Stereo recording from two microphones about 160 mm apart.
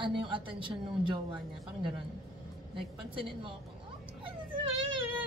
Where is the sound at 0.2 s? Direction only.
30° right (ahead or behind).